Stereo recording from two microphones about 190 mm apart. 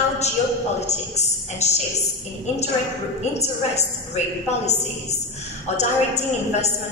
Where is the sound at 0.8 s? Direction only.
35° left (ahead or behind).